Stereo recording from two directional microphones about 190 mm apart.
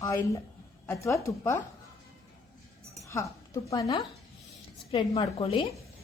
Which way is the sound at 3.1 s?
15° left (ahead or behind).